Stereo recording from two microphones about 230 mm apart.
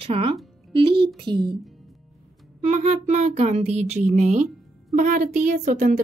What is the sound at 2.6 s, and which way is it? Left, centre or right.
Speech, right.